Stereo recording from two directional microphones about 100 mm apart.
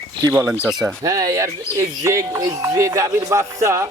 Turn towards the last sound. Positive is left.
turn(degrees=-30)  # may be behind; listen again after turning